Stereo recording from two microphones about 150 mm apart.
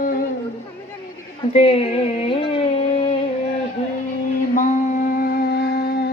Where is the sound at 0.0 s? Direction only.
75° left (ahead or behind).